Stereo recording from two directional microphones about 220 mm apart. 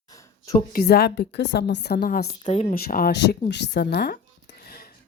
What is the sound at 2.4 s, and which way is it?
Speech, 30° left (ahead or behind).